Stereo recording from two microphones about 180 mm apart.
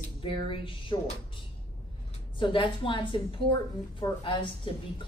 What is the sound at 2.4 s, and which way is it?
A woman's voice, 30° left (ahead or behind).